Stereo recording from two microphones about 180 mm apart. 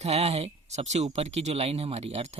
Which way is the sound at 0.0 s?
35° right (ahead or behind).